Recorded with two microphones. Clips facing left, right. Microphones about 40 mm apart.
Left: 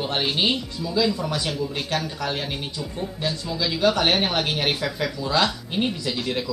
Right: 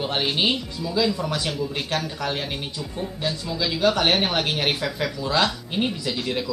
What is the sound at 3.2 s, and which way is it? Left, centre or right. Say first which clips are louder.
Speech: even; centre.